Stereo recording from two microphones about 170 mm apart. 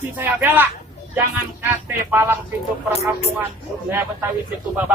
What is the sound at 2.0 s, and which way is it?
Speech, 10° right (ahead or behind).